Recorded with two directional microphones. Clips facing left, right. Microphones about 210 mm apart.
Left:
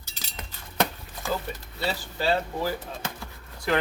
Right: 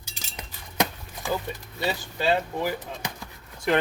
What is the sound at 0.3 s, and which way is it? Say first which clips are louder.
Cutlery: even; 15° right (ahead or behind).